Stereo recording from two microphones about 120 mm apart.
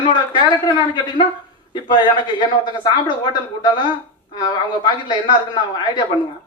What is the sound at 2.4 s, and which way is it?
A man's voice, 40° left (ahead or behind).